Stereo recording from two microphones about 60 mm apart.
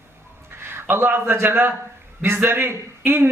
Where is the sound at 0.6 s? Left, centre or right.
Right.